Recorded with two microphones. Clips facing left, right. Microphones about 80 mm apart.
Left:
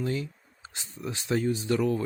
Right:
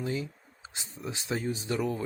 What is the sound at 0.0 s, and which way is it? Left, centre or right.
Speech, right.